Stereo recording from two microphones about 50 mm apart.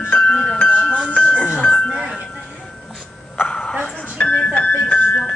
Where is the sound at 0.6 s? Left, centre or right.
Left.